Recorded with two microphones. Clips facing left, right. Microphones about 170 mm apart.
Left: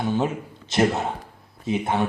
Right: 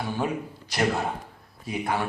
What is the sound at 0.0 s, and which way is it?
Speech, 20° left (ahead or behind).